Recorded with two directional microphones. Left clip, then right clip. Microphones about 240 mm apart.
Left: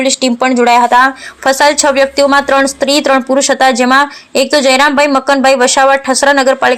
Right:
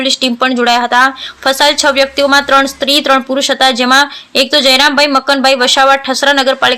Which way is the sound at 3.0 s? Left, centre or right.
Centre.